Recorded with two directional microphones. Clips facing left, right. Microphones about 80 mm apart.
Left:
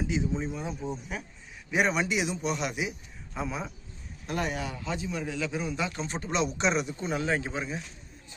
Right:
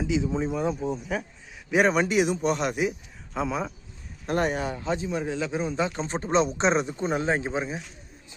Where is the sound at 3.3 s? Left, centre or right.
Right.